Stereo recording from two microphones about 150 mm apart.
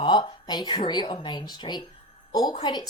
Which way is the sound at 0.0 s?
30° left (ahead or behind).